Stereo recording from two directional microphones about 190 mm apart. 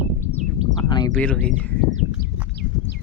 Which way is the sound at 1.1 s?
5° left (ahead or behind).